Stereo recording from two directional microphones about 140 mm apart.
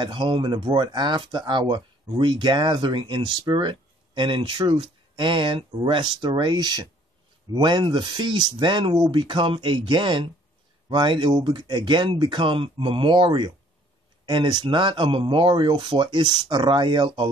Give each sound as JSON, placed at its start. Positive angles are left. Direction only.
{"t": 0.0, "sound": "speech", "side_deg": -35}